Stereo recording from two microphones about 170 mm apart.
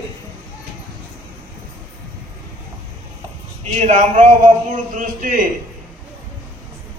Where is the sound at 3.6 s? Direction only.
40° right (ahead or behind).